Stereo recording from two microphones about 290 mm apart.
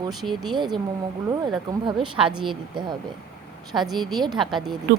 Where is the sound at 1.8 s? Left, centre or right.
Centre.